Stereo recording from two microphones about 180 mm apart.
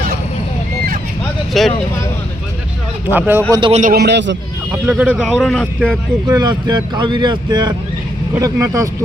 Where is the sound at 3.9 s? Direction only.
70° right (ahead or behind).